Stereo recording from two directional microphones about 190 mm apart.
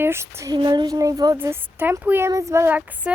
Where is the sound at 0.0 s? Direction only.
15° right (ahead or behind).